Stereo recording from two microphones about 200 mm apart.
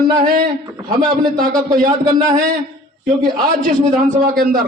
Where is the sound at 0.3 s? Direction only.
45° right (ahead or behind).